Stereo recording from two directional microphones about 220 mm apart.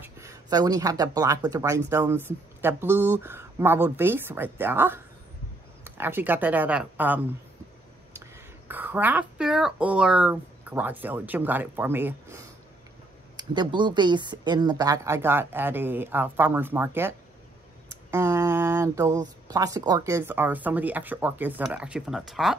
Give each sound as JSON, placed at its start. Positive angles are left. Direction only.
{"t": 0.0, "sound": "speech", "side_deg": -15}
{"t": 8.6, "sound": "speech", "side_deg": -10}
{"t": 18.1, "sound": "speech", "side_deg": -10}